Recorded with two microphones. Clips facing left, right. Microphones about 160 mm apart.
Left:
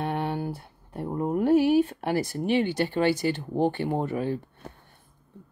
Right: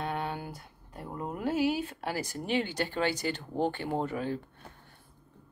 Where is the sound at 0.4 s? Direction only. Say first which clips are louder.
Left 9 dB; 30° left (ahead or behind).